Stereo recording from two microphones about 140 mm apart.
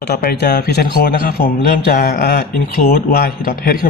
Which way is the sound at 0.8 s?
90° left.